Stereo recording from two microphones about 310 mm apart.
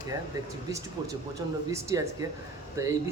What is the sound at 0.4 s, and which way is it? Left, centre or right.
Speech, centre.